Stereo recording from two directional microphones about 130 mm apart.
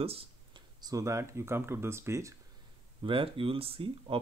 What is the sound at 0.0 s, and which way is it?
Speech, 50° right (ahead or behind).